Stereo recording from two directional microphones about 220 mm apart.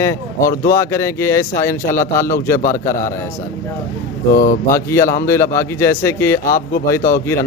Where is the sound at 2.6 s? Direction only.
35° left (ahead or behind).